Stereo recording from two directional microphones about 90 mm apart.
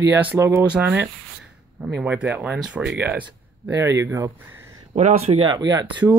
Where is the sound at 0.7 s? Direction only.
15° right (ahead or behind).